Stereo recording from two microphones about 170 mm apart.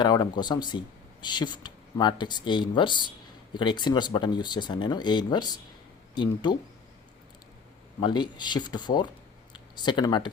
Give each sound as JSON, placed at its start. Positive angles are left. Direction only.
{"t": 0.0, "sound": "speech", "side_deg": 25}
{"t": 8.0, "sound": "speech", "side_deg": 25}